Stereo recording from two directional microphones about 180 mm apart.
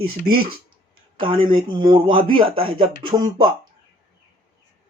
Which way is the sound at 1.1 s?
30° right (ahead or behind).